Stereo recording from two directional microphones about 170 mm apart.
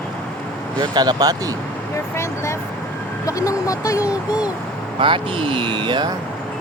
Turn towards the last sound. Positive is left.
turn(degrees=-30)  # may be behind; listen again after turning